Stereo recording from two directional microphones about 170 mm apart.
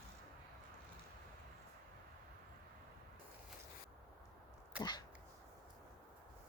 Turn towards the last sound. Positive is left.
turn(degrees=25)  # may be behind; listen again after turning